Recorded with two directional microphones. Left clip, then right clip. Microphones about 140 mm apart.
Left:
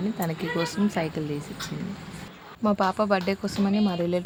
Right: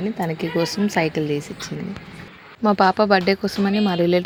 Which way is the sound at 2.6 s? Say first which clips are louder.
Right 7 dB; 20° right (ahead or behind).